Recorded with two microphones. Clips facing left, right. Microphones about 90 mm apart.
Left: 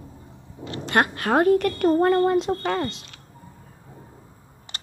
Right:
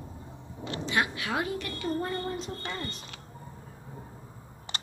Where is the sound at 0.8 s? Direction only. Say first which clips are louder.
Left 8 dB; 55° left (ahead or behind); by 3.1 s 85° left.